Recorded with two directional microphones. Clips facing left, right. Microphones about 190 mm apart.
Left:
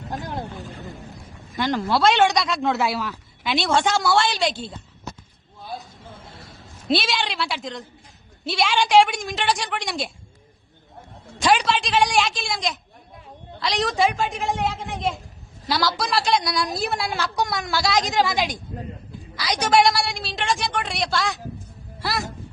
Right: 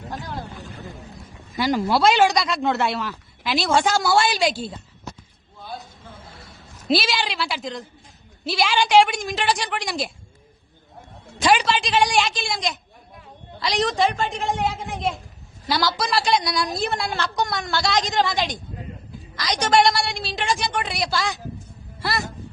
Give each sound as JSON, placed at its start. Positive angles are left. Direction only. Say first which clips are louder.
{"t": 0.1, "sound": "vehicle", "louder": "left 3 dB", "side_deg": 20}
{"t": 0.4, "sound": "a man's voice", "louder": "left 2 dB", "side_deg": 0}
{"t": 5.7, "sound": "a sound", "louder": "left 1 dB", "side_deg": 0}
{"t": 8.4, "sound": "a woman's voice", "louder": "even", "side_deg": 0}
{"t": 11.3, "sound": "a woman's voice", "louder": "right 1 dB", "side_deg": 0}